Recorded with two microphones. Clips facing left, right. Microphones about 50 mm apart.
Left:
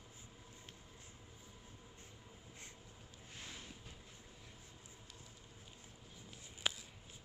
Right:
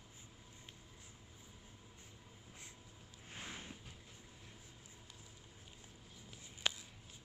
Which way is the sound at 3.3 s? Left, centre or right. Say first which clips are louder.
Right 3 dB; right.